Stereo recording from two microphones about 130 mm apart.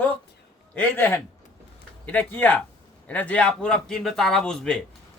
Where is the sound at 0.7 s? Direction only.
15° left (ahead or behind).